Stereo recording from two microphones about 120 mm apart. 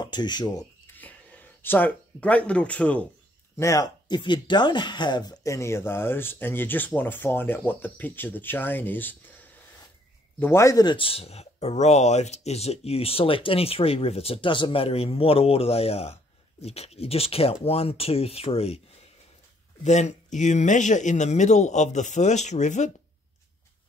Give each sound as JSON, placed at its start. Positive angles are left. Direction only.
{"t": 0.0, "sound": "speech", "side_deg": 40}
{"t": 0.9, "sound": "a sound", "side_deg": 15}
{"t": 3.5, "sound": "speech", "side_deg": 25}
{"t": 10.4, "sound": "speech", "side_deg": 25}
{"t": 19.8, "sound": "speech", "side_deg": 75}